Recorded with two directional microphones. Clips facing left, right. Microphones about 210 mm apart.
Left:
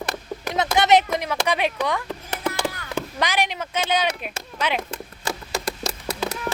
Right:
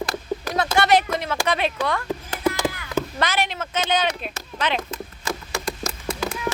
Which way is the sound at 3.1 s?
15° left (ahead or behind).